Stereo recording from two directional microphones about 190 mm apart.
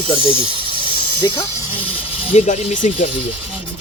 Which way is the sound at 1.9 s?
35° left (ahead or behind).